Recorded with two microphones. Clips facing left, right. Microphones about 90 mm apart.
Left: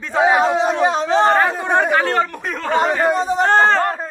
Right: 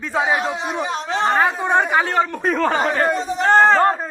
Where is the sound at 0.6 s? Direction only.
90° left.